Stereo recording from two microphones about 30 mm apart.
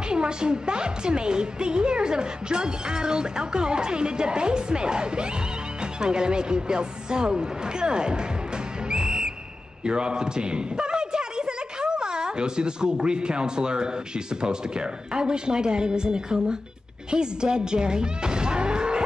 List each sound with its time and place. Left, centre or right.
0.1 s speech: right
8.8 s whistle: right
9.8 s a man's voice: right